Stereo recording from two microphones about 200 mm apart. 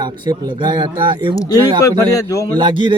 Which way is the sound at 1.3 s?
15° left (ahead or behind).